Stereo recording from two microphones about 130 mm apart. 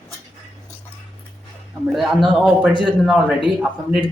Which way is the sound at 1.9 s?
Centre (ahead or behind).